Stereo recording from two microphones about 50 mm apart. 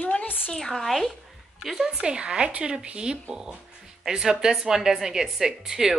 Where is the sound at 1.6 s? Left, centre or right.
Centre.